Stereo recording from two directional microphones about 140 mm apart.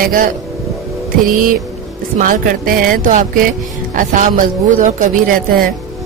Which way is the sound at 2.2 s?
75° right (ahead or behind).